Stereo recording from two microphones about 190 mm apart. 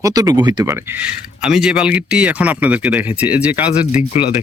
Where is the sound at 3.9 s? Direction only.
30° left (ahead or behind).